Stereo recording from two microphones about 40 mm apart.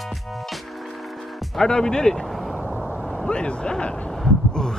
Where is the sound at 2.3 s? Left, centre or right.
Centre.